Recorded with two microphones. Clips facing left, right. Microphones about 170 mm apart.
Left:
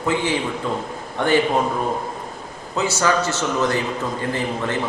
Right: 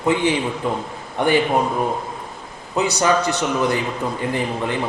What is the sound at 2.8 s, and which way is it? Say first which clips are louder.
A man's voice: right 2 dB; 15° right (ahead or behind).